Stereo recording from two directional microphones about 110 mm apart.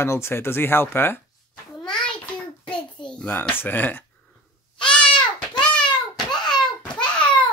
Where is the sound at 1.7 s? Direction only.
5° left (ahead or behind).